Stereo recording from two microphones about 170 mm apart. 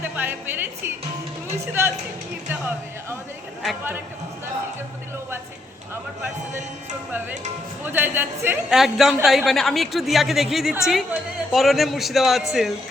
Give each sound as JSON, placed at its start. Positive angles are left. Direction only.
{"t": 0.0, "sound": "a woman's voice", "side_deg": -10}
{"t": 7.9, "sound": "a woman's voice", "side_deg": -10}
{"t": 8.8, "sound": "a woman's voice", "side_deg": 0}